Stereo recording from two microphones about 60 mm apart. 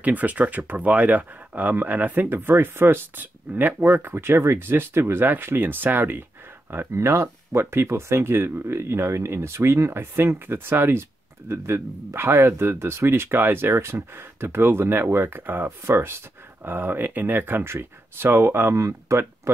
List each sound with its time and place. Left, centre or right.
0.0 s speech: right
7.0 s speech: right
15.8 s speech: right
16.6 s speech: right
18.8 s speech: right